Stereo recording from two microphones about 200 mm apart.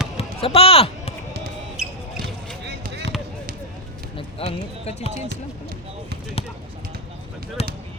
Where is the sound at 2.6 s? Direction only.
55° right (ahead or behind).